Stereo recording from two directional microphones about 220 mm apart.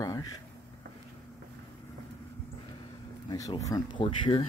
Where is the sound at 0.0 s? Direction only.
15° left (ahead or behind).